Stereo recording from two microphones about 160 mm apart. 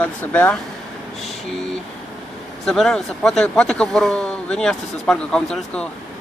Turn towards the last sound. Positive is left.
turn(degrees=5)  # may be behind; listen again after turning